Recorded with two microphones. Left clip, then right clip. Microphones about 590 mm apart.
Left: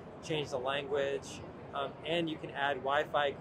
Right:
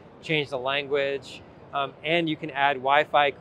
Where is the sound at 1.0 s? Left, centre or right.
Right.